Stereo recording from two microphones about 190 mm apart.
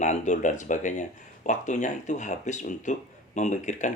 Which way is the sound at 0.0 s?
40° left (ahead or behind).